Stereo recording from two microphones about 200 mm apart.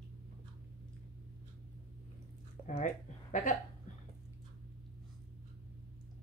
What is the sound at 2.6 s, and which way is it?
Speech, 40° left (ahead or behind).